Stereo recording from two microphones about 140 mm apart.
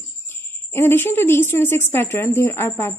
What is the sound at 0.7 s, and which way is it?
Speech, 15° left (ahead or behind).